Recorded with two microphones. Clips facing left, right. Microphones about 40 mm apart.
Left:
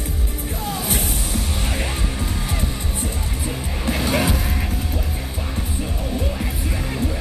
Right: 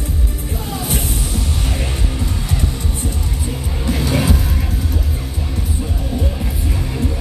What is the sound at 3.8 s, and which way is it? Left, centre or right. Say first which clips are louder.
Music: right 1 dB; centre.